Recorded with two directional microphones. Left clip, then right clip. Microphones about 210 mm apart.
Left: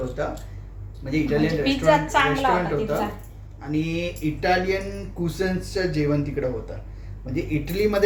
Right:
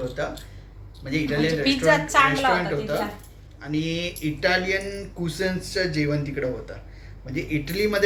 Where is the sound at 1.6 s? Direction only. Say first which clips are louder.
Even; 20° right (ahead or behind).